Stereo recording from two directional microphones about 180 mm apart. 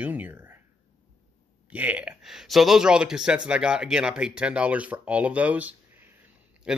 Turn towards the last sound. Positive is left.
turn(degrees=-5)  # may be behind; listen again after turning